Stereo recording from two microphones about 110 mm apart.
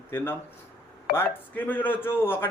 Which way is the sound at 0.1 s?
20° left (ahead or behind).